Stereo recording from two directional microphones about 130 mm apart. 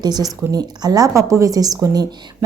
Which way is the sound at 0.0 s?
30° right (ahead or behind).